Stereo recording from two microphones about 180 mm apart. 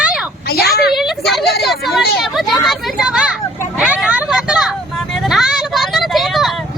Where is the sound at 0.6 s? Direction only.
60° left (ahead or behind).